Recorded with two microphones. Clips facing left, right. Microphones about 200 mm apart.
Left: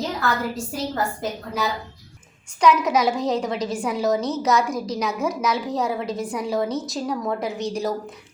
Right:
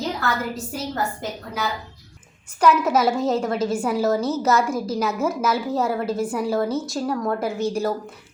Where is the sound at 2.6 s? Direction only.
5° right (ahead or behind).